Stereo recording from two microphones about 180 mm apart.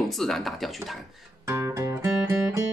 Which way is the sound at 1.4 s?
15° right (ahead or behind).